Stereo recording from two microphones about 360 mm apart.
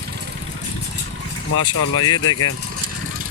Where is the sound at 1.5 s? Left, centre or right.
Left.